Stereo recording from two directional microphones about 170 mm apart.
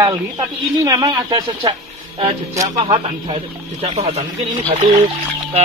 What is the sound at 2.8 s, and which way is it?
Speech, 35° right (ahead or behind).